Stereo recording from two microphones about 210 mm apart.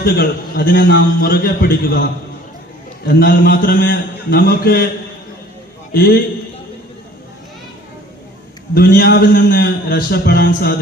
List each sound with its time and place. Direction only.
0.0 s a man's voice: 45° left (ahead or behind)
3.1 s a man's voice: 45° left (ahead or behind)
5.9 s a man's voice: 45° left (ahead or behind)
8.7 s a man's voice: 45° left (ahead or behind)